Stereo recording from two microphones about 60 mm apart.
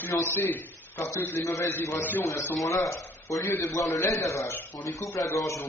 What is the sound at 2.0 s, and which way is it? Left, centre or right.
Speech, left.